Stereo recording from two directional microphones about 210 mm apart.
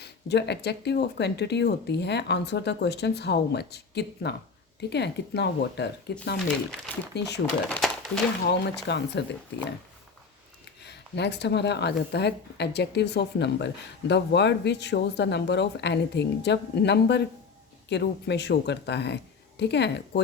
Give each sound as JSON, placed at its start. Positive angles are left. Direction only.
{"t": 0.0, "sound": "speech", "side_deg": 55}
{"t": 7.7, "sound": "a sound", "side_deg": 5}
{"t": 8.4, "sound": "speech", "side_deg": 55}
{"t": 10.8, "sound": "speech", "side_deg": 55}